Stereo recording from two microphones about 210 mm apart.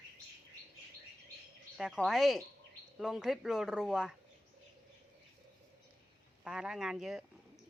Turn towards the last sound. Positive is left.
turn(degrees=0)  # may be behind; listen again after turning